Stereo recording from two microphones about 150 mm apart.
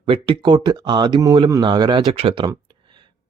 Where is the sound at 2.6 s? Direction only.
30° right (ahead or behind).